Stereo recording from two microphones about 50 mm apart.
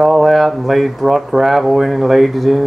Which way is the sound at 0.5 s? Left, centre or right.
Centre.